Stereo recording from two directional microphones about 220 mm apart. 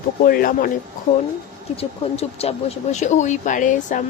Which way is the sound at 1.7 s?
30° left (ahead or behind).